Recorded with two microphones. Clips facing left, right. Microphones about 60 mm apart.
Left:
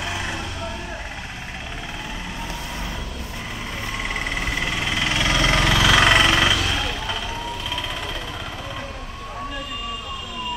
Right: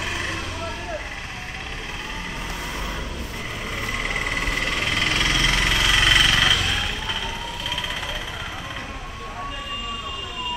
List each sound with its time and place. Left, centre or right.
5.0 s engine: centre
5.3 s engine: left
5.6 s engine: left
6.0 s a sound: left
6.5 s vehicle: centre